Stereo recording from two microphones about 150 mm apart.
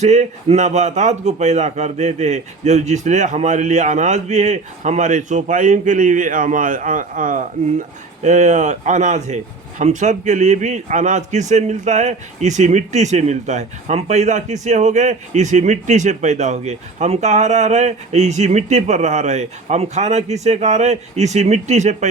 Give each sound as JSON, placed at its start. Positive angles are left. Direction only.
{"t": 0.0, "sound": "a man's voice", "side_deg": -50}
{"t": 8.2, "sound": "a man's voice", "side_deg": -50}